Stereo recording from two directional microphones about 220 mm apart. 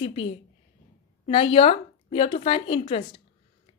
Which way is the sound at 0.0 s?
25° left (ahead or behind).